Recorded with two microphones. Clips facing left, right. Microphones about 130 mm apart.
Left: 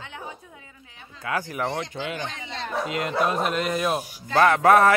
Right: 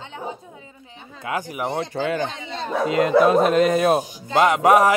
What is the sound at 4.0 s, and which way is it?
Speech, 20° right (ahead or behind).